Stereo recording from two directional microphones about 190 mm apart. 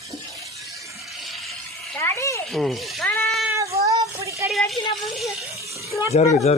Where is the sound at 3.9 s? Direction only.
15° right (ahead or behind).